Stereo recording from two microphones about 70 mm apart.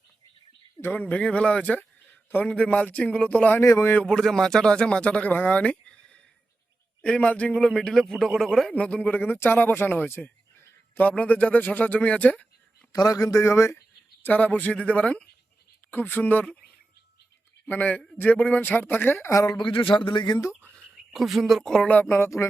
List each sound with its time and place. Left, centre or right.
0.8 s speech: left
3.6 s speech: left
4.0 s speech: centre
7.6 s a man's voice: centre
8.7 s speech: centre
12.9 s a man's voice: left
13.4 s a sound: left
14.3 s speech: left
15.9 s speech: left
17.7 s speech: centre
19.3 s a man's voice: left
20.9 s speech: centre
22.0 s speech: left